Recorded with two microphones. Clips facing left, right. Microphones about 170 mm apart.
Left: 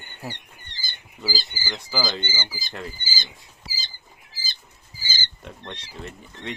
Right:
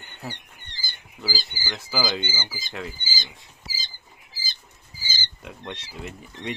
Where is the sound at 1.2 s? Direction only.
Centre (ahead or behind).